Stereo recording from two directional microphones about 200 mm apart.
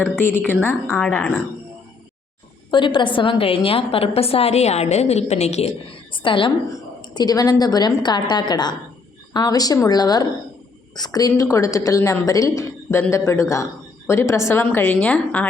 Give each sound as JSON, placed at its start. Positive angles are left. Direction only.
{"t": 0.0, "sound": "a woman's voice", "side_deg": 10}
{"t": 2.6, "sound": "a woman's voice", "side_deg": 25}